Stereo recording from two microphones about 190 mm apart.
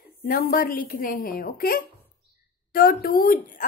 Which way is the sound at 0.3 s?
50° left (ahead or behind).